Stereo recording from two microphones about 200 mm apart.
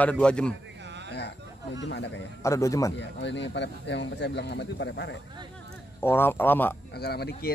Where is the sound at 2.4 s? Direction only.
15° left (ahead or behind).